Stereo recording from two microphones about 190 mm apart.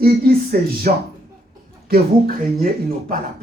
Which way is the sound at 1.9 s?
50° right (ahead or behind).